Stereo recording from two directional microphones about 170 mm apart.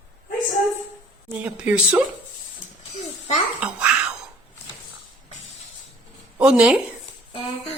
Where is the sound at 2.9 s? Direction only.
40° left (ahead or behind).